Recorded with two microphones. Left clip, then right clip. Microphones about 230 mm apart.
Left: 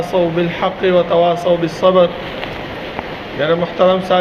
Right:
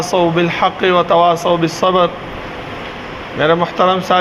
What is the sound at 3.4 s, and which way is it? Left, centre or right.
Speech, right.